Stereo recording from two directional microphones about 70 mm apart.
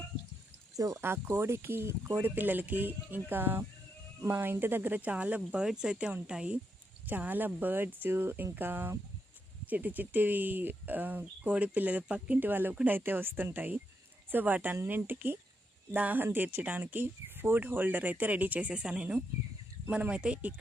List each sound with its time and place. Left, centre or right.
0.8 s speech: right
1.0 s speech: right
2.2 s speech: right
5.5 s speech: centre
7.1 s speech: right